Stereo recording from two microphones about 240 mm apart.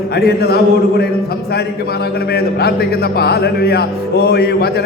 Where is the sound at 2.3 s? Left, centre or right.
Left.